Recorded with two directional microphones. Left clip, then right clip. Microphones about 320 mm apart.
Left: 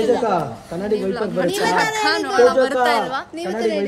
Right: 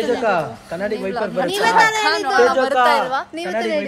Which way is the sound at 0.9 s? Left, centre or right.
Centre.